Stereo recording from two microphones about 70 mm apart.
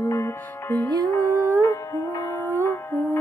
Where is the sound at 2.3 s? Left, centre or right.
Left.